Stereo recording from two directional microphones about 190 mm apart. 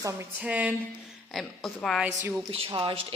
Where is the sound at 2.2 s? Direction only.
15° right (ahead or behind).